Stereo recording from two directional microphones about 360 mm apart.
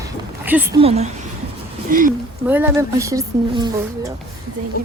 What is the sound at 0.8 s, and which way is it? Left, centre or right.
Speech, centre.